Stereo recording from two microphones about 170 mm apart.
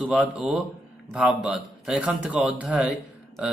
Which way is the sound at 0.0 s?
5° right (ahead or behind).